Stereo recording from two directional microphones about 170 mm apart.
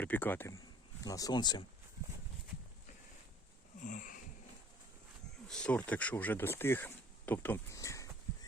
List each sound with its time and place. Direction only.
0.0 s speech: 10° left (ahead or behind)
3.8 s wheeze: 50° left (ahead or behind)
5.5 s speech: 5° left (ahead or behind)